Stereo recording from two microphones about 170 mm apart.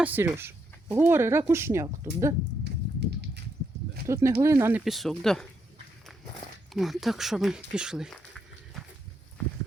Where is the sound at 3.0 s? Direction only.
80° right.